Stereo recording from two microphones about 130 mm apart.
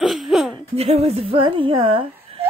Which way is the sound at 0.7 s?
50° right (ahead or behind).